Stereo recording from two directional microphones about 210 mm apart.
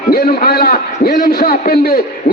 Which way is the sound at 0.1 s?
45° left (ahead or behind).